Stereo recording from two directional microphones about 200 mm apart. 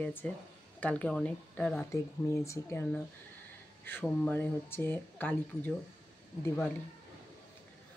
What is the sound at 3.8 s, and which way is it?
Speech, 10° left (ahead or behind).